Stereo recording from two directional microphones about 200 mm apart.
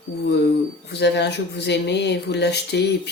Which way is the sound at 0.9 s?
55° left (ahead or behind).